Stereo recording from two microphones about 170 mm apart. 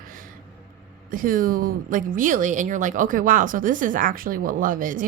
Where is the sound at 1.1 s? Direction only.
55° right (ahead or behind).